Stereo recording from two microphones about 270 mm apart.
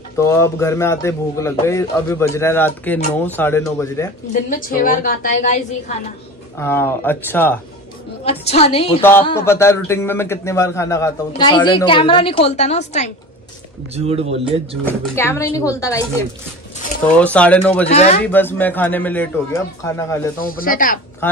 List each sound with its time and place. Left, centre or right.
0.2 s speech: centre
4.3 s a woman's voice: left
6.6 s speech: centre
8.3 s a woman's voice: left
9.2 s speech: centre
13.9 s speech: right
14.9 s speech: centre
17.8 s a woman's voice: left
18.2 s speech: centre
20.3 s speech: left